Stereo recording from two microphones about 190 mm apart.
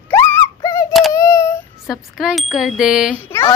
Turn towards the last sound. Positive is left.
turn(degrees=15)  # may be behind; listen again after turning